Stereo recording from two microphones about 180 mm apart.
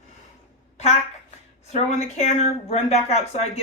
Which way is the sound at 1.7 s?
40° left (ahead or behind).